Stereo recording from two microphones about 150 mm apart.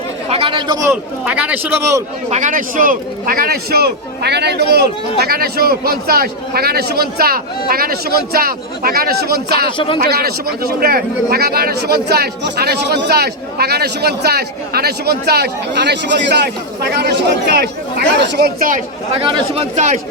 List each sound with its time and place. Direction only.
0.3 s a man's voice: 35° right (ahead or behind)
1.2 s a man's voice: 10° right (ahead or behind)
1.8 s a man's voice: 20° right (ahead or behind)
2.3 s a man's voice: 60° right (ahead or behind); by 9.6 s 90° right
9.7 s speech: 35° left (ahead or behind)
10.0 s a man's voice: 90° right
19.2 s a man's voice: 35° right (ahead or behind)
19.7 s a man's voice: 55° right (ahead or behind)